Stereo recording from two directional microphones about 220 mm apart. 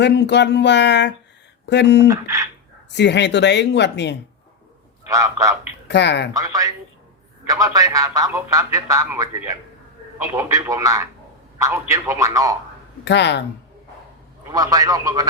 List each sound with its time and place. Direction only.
0.0 s a woman's voice: 50° left (ahead or behind)
2.0 s a man's voice: 15° right (ahead or behind)
2.9 s a woman's voice: 50° left (ahead or behind)
5.0 s a man's voice: 15° right (ahead or behind)
5.9 s a woman's voice: 50° left (ahead or behind)
6.3 s a man's voice: 15° right (ahead or behind)
13.1 s a woman's voice: 50° left (ahead or behind)
14.5 s a man's voice: 15° right (ahead or behind)